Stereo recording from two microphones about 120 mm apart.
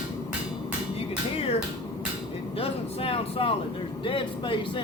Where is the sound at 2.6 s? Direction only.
50° left (ahead or behind).